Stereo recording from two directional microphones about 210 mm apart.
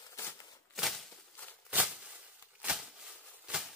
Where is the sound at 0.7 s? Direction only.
Centre (ahead or behind).